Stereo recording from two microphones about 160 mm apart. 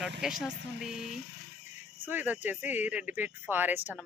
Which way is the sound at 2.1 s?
10° right (ahead or behind).